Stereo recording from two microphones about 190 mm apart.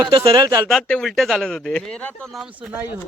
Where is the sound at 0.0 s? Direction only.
20° right (ahead or behind).